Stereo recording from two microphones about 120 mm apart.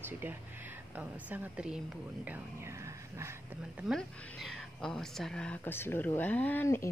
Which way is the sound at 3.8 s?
5° right (ahead or behind).